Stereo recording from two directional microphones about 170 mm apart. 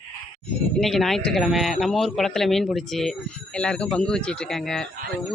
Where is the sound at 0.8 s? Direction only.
Centre (ahead or behind).